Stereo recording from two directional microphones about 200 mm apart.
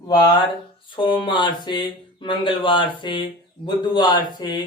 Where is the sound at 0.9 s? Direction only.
25° left (ahead or behind).